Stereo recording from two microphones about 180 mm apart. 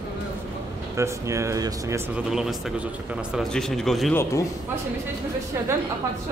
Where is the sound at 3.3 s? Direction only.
Centre (ahead or behind).